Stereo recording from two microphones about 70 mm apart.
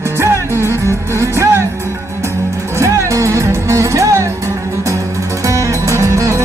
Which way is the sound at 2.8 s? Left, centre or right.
Right.